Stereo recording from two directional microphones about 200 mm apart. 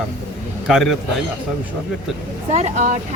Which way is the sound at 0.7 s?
Centre (ahead or behind).